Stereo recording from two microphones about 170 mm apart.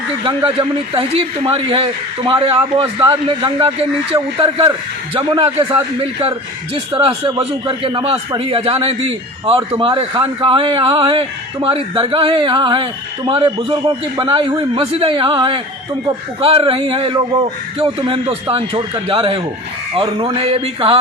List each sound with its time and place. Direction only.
0.2 s speech: 30° right (ahead or behind)